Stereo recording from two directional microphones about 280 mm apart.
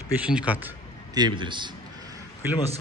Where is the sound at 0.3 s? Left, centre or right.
Centre.